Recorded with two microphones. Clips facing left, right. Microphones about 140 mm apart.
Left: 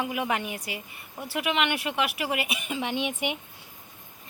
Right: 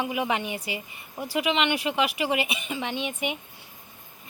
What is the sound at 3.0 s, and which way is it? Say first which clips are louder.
Speech: even; 70° left (ahead or behind).